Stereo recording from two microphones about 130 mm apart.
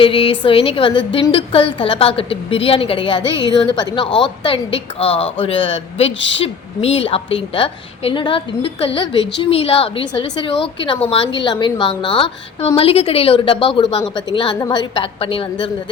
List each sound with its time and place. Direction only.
0.0 s a woman's voice: 45° left (ahead or behind)
14.0 s a woman's voice: 30° left (ahead or behind)